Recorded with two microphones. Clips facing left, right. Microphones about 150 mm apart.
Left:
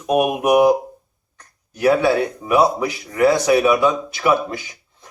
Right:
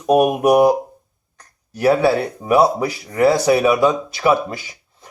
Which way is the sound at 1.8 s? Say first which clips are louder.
Right 1 dB; 35° right (ahead or behind).